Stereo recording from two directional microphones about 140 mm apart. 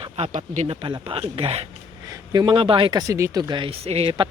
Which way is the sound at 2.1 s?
30° right (ahead or behind).